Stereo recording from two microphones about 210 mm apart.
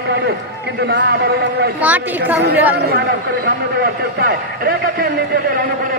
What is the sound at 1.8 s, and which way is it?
A woman's voice, 10° right (ahead or behind).